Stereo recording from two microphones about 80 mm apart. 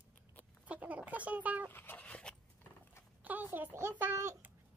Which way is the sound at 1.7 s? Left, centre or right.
Left.